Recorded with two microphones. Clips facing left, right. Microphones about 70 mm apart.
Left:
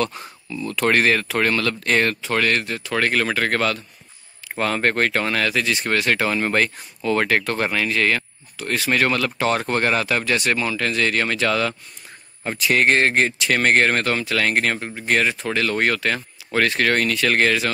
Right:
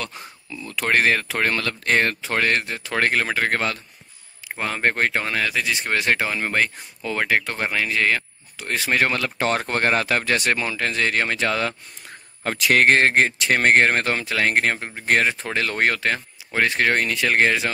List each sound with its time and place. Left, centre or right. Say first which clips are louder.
0.0 s speech: left 8 dB; centre; by 11.7 s right
12.4 s speech: right 1 dB; right
12.8 s speech: right 1 dB; right